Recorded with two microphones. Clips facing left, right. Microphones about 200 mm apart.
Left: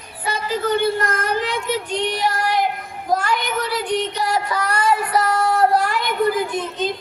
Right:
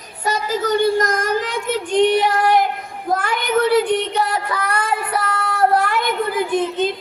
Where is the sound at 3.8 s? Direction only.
55° right (ahead or behind).